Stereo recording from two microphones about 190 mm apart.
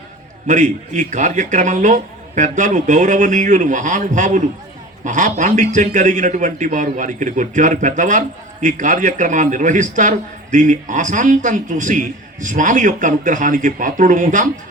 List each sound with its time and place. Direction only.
0.4 s a man's voice: 40° right (ahead or behind)